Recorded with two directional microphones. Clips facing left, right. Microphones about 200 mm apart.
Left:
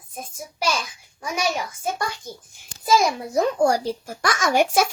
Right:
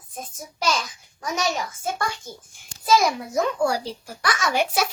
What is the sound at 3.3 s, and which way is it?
A child's voice, 35° left (ahead or behind).